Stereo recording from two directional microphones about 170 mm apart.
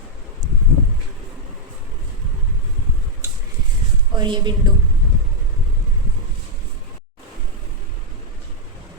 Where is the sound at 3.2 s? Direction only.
15° right (ahead or behind).